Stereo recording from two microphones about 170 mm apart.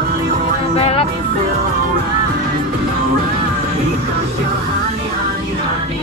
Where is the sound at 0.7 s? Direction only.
35° left (ahead or behind).